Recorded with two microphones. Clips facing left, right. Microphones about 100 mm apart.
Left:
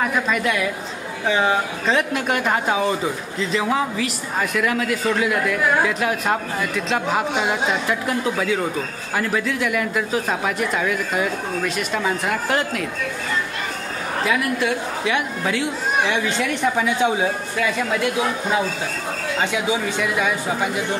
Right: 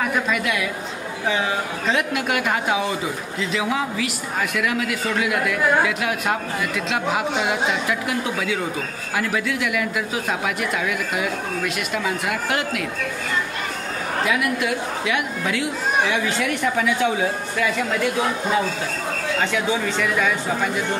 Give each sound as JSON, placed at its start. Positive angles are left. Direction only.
{"t": 1.9, "sound": "speech", "side_deg": 35}
{"t": 9.1, "sound": "speech", "side_deg": 40}
{"t": 14.2, "sound": "a woman's voice", "side_deg": 30}
{"t": 19.4, "sound": "speech", "side_deg": 15}